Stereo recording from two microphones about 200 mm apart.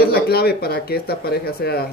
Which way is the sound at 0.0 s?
50° left (ahead or behind).